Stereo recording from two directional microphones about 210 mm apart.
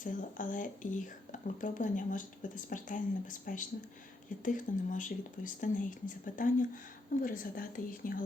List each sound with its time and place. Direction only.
0.0 s speech: 40° left (ahead or behind)